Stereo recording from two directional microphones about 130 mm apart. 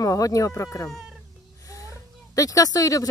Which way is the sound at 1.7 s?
25° left (ahead or behind).